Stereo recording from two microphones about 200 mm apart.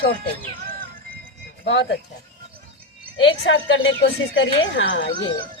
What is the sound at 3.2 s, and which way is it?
Speech, 75° left (ahead or behind).